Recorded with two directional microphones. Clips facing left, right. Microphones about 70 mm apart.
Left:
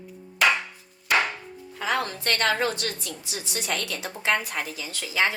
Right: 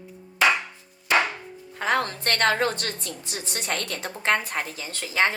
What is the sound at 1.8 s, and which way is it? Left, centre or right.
A woman's voice, right.